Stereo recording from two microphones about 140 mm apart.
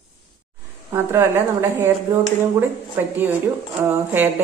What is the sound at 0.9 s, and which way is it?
Speech, 20° right (ahead or behind).